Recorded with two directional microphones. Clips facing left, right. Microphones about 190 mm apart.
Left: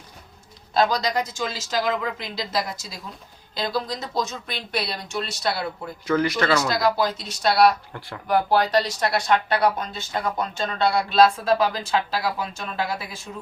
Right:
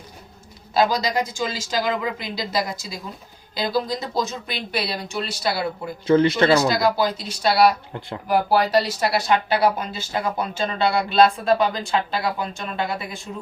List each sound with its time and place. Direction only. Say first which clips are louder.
0.7 s speech: right 1 dB; 5° right (ahead or behind)
6.1 s speech: right 5 dB; 25° right (ahead or behind)
6.7 s speech: right 2 dB; centre (ahead or behind)